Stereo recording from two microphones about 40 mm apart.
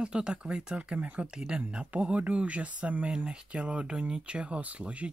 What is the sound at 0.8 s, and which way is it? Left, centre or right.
Speech, right.